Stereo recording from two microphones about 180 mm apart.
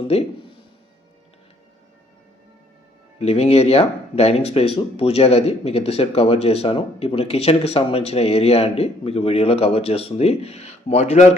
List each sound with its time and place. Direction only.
0.1 s speech: 35° left (ahead or behind)
3.2 s speech: 35° left (ahead or behind)